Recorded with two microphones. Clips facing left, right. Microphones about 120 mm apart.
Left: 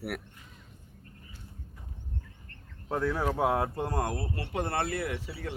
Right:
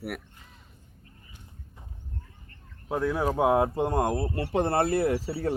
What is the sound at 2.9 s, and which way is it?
Speech, 15° right (ahead or behind).